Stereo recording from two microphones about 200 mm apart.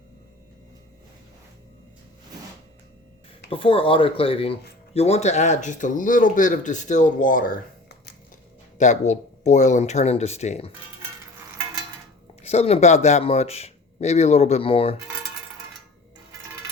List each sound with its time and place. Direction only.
3.5 s speech: 25° left (ahead or behind); by 8.1 s 50° left (ahead or behind)
8.8 s speech: 35° left (ahead or behind)
12.4 s speech: 30° left (ahead or behind)